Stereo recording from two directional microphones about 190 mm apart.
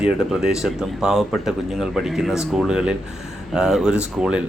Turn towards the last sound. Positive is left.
turn(degrees=-5)  # may be behind; listen again after turning